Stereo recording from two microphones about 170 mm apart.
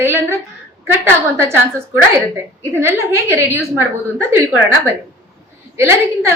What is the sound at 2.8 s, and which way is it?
A woman's voice, 15° right (ahead or behind).